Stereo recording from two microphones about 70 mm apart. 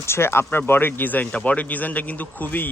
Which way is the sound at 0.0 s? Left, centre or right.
Left.